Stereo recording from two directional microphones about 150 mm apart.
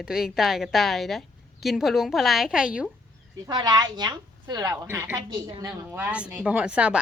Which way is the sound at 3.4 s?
25° right (ahead or behind).